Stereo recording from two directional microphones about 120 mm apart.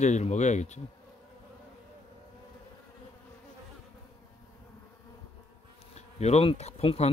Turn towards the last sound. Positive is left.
turn(degrees=60)  # may be behind; listen again after turning